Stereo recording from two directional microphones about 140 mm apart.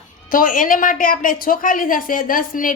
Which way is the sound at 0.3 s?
75° left (ahead or behind).